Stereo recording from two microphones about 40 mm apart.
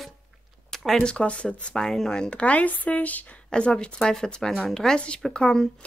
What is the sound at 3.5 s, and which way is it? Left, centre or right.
Speech, left.